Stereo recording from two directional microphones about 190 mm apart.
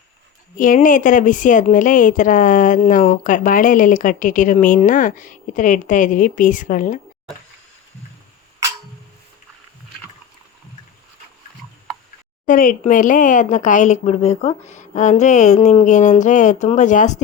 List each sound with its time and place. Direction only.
0.6 s a woman's voice: 45° left (ahead or behind)
12.5 s a woman's voice: 45° left (ahead or behind)